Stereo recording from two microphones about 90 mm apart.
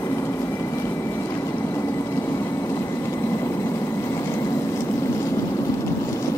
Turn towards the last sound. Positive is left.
turn(degrees=30)  # may be behind; listen again after turning